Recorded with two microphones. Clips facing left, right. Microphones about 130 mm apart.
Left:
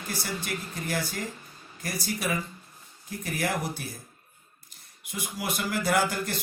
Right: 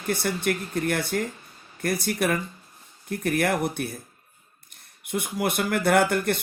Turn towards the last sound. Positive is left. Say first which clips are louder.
# right 5 dB
turn(degrees=-60)  # may be behind; listen again after turning